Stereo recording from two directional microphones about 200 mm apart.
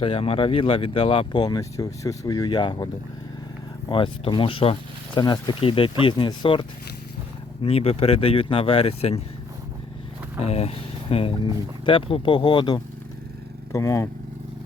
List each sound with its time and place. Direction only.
0.0 s speech: 30° left (ahead or behind)
10.4 s speech: 30° left (ahead or behind); by 14.1 s 15° left (ahead or behind)